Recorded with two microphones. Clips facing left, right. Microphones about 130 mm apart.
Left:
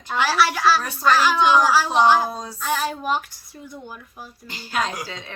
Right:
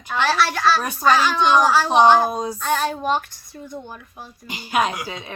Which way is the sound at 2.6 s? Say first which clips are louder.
Left 1 dB; 5° left (ahead or behind).